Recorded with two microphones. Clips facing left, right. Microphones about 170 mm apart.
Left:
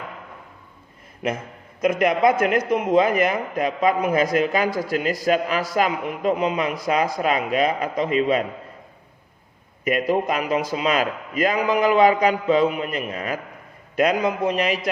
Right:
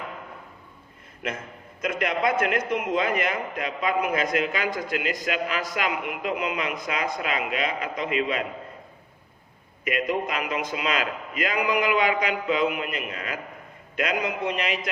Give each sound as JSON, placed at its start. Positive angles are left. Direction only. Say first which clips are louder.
{"t": 1.8, "sound": "a man's voice", "louder": "left 7 dB", "side_deg": 45}
{"t": 9.8, "sound": "a man's voice", "louder": "left 5 dB", "side_deg": 40}